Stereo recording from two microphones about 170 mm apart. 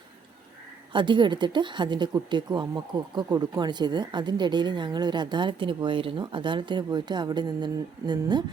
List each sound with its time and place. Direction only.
0.9 s speech: 30° right (ahead or behind)